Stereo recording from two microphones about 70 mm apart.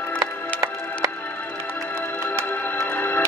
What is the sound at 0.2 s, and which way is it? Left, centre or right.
Music, right.